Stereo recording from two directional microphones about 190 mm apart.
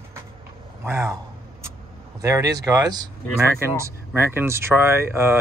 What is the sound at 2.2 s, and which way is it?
Speech, 15° right (ahead or behind).